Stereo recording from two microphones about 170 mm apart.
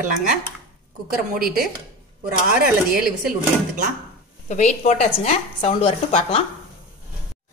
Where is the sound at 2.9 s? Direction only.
60° right (ahead or behind).